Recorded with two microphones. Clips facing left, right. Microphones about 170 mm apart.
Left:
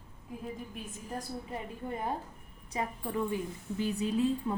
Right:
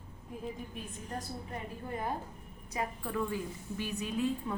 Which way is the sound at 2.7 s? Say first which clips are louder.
Left 1 dB; 25° left (ahead or behind).